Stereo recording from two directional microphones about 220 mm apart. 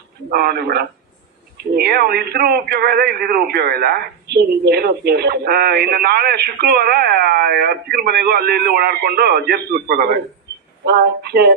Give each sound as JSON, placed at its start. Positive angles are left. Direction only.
{"t": 0.3, "sound": "a man's voice", "side_deg": -45}